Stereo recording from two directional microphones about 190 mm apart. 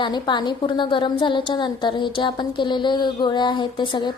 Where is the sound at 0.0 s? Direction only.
25° left (ahead or behind).